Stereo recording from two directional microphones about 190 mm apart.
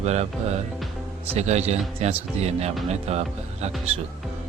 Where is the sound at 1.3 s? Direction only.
35° right (ahead or behind).